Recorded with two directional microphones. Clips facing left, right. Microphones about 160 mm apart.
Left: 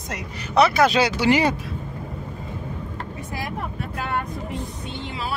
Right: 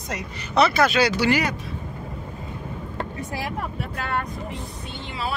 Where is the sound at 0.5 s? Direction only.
15° left (ahead or behind).